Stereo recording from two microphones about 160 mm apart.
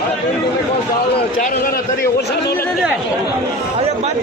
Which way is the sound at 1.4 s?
65° left (ahead or behind).